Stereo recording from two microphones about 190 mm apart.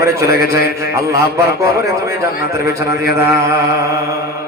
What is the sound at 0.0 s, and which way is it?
A man's voice, 15° right (ahead or behind).